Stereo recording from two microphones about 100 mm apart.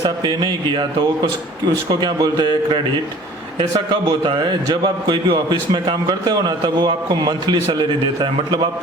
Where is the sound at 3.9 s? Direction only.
45° right (ahead or behind).